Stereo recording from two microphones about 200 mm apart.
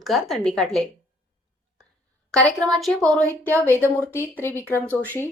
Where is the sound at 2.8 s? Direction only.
Centre (ahead or behind).